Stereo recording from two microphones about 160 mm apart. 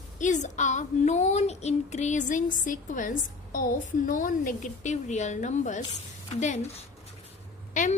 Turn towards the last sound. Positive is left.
turn(degrees=50)  # may be behind; listen again after turning